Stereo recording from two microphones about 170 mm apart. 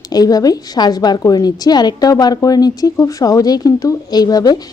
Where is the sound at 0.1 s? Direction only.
20° left (ahead or behind).